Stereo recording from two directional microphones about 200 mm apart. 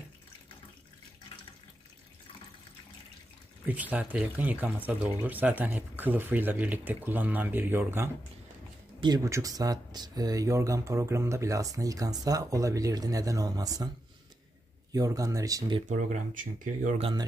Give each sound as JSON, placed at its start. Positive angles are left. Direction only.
{"t": 3.6, "sound": "speech", "side_deg": -10}
{"t": 14.9, "sound": "speech", "side_deg": -15}
{"t": 16.5, "sound": "speech", "side_deg": -40}